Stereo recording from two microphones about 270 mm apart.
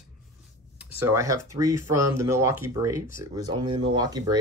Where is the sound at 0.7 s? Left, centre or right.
Centre.